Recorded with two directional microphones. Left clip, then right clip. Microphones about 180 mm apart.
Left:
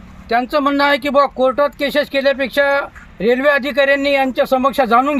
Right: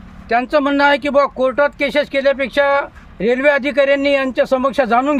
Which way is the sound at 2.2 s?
30° right (ahead or behind).